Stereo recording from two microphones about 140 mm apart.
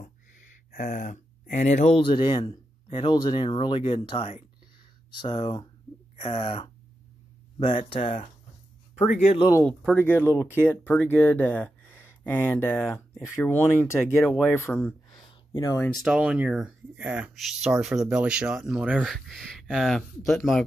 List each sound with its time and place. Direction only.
0.7 s speech: 85° left; by 2.0 s 55° left (ahead or behind)
2.0 s speech: 40° left (ahead or behind)
7.6 s speech: 55° left (ahead or behind)
9.9 s speech: 15° left (ahead or behind)
15.5 s speech: 25° left (ahead or behind)
15.9 s speech: 5° right (ahead or behind)